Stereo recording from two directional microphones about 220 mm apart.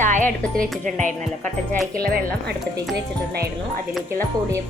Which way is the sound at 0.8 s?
35° right (ahead or behind).